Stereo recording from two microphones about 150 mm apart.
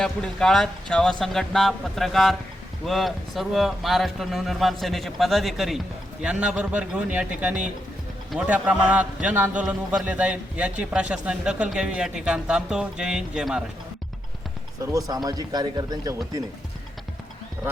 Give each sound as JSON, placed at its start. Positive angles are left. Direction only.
{"t": 0.0, "sound": "a man's voice", "side_deg": 5}
{"t": 14.8, "sound": "speech", "side_deg": -20}